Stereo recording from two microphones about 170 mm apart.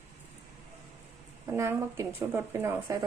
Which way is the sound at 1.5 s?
15° right (ahead or behind).